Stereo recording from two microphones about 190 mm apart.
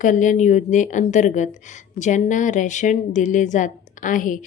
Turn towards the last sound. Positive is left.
turn(degrees=45)  # may be behind; listen again after turning